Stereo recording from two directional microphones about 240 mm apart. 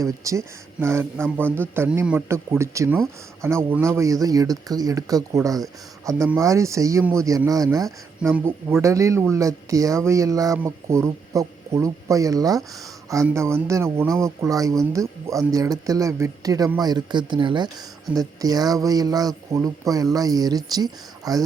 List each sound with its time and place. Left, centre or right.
0.0 s speech: centre